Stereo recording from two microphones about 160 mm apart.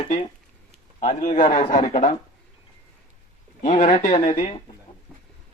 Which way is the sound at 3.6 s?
40° left (ahead or behind).